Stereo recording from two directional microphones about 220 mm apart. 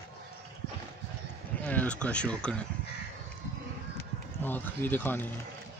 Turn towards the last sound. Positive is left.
turn(degrees=10)  # may be behind; listen again after turning